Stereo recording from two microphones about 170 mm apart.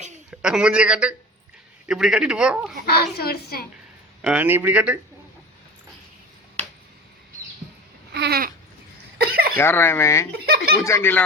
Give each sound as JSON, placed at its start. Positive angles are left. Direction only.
{"t": 0.3, "sound": "a man's voice", "side_deg": -5}
{"t": 2.8, "sound": "a woman's voice", "side_deg": 70}
{"t": 4.2, "sound": "speech", "side_deg": -10}
{"t": 8.1, "sound": "babbling", "side_deg": -70}
{"t": 9.1, "sound": "a sound", "side_deg": -65}
{"t": 9.6, "sound": "speech", "side_deg": 15}
{"t": 10.3, "sound": "speech", "side_deg": -70}
{"t": 10.8, "sound": "speech", "side_deg": 15}